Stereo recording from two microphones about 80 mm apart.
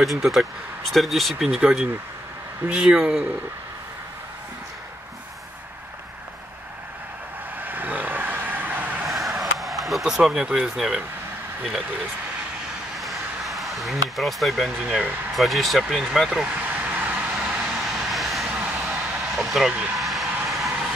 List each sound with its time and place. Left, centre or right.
0.0 s speech: centre
7.6 s vehicle: right
9.0 s a sound: centre
12.9 s a sound: centre
15.0 s speech: right
15.3 s speech: centre
16.4 s vehicle: right
17.7 s vehicle: centre
18.5 s a sound: centre
19.3 s speech: centre
19.7 s speech: centre
20.0 s vehicle: centre